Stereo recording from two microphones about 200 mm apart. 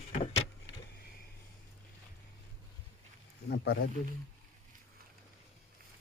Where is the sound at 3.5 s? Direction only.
50° left (ahead or behind).